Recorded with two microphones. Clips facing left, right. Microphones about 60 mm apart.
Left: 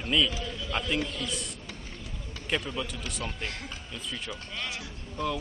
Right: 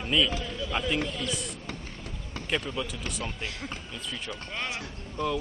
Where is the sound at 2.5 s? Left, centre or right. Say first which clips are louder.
Right 1 dB; centre.